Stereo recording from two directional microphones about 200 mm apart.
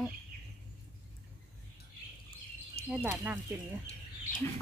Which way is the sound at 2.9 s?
5° right (ahead or behind).